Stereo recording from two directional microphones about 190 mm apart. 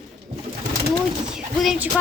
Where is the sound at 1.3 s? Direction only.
5° right (ahead or behind).